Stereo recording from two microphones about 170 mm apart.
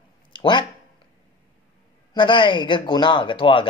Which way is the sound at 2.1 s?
30° left (ahead or behind).